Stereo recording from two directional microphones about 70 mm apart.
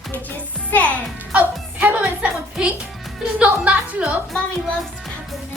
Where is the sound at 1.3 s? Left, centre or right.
Right.